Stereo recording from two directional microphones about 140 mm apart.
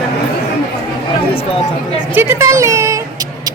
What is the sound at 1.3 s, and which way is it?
Speech, 45° left (ahead or behind).